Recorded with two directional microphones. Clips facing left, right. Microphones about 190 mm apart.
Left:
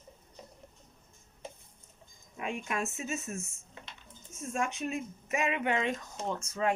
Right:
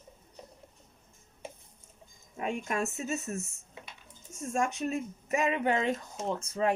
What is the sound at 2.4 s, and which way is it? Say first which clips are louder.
Speech: right 3 dB; 40° right (ahead or behind).